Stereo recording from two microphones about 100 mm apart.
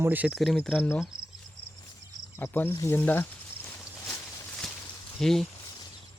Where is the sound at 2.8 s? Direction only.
20° left (ahead or behind).